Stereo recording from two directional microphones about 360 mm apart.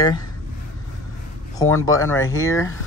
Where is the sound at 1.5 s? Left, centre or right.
Centre.